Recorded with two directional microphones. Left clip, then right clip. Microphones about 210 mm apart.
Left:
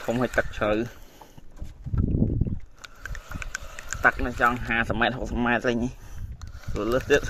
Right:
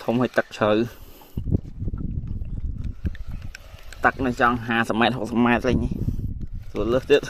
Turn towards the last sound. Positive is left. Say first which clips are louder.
# right 3 dB
turn(degrees=-45)  # may be behind; listen again after turning